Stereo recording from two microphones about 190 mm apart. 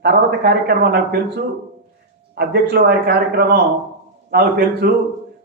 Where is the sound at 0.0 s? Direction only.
60° right (ahead or behind).